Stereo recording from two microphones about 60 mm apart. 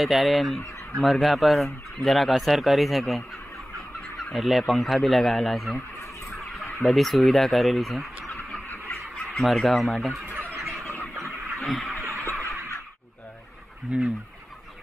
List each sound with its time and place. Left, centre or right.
0.0 s speech: centre
10.6 s bird: centre
11.6 s vehicle: centre
12.0 s fowl: right
12.4 s a sound: left
13.9 s fowl: centre